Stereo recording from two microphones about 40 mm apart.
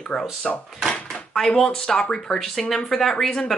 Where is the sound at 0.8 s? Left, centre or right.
Centre.